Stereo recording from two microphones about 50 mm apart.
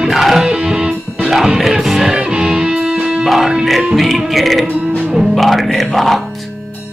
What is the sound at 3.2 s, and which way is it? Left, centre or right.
A man's voice, centre.